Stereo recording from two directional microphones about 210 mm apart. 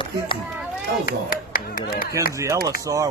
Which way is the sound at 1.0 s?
40° left (ahead or behind).